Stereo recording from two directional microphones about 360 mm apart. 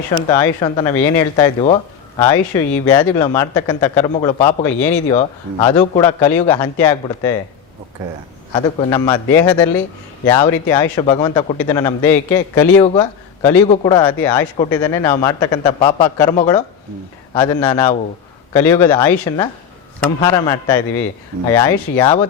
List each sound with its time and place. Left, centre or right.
0.3 s a man's voice: centre
8.5 s a man's voice: centre